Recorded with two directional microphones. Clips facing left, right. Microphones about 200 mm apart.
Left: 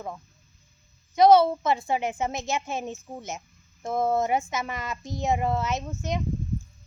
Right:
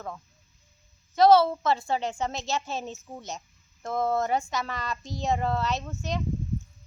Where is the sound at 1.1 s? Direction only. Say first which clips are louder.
Left 1 dB; 20° left (ahead or behind).